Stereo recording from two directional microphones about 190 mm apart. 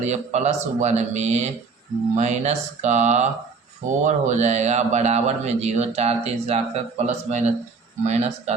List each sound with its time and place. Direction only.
0.0 s a man's voice: 35° right (ahead or behind)